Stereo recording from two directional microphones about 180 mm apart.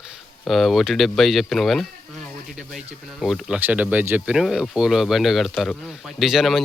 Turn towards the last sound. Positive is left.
turn(degrees=0)  # may be behind; listen again after turning